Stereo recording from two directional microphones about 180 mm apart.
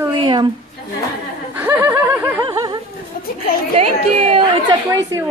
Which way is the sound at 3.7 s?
35° right (ahead or behind).